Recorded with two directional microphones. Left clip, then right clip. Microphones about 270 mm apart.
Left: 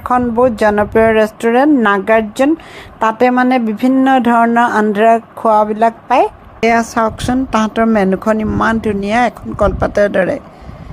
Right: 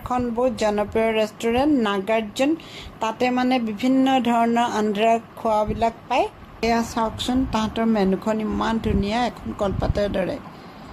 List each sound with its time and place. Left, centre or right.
0.0 s speech: left